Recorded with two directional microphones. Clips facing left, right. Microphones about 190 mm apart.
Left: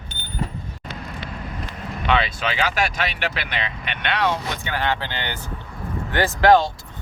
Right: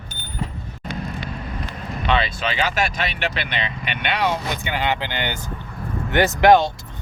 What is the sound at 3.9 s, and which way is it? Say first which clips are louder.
Speech: even; 10° right (ahead or behind).